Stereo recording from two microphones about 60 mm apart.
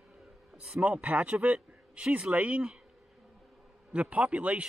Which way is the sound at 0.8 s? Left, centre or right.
Right.